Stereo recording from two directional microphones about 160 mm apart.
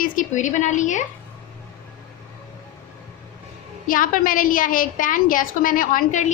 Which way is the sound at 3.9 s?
60° left (ahead or behind).